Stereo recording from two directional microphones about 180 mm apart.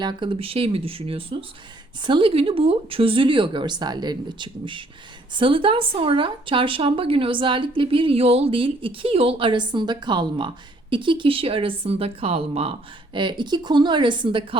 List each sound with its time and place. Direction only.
0.0 s speech: 25° right (ahead or behind)